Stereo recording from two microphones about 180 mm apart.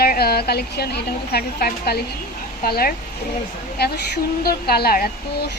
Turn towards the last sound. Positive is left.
turn(degrees=55)  # may be behind; listen again after turning